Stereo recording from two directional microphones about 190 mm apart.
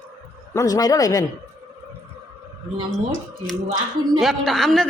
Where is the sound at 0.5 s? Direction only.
20° left (ahead or behind).